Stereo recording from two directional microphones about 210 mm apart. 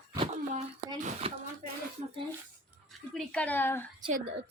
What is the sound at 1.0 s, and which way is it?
Speech, 35° right (ahead or behind).